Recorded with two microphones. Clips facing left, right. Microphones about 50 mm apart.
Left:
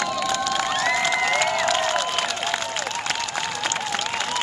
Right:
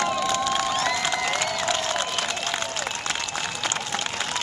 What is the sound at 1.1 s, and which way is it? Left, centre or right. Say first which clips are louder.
Applause: left 4 dB; left.